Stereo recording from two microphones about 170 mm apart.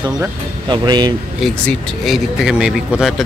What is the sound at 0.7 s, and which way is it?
Speech, 25° right (ahead or behind).